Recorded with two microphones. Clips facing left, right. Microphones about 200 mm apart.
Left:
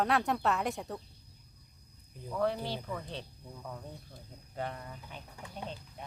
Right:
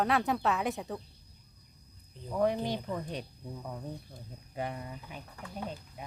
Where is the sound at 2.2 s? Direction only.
15° right (ahead or behind).